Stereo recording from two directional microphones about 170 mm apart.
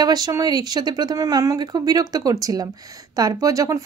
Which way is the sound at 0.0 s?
25° right (ahead or behind).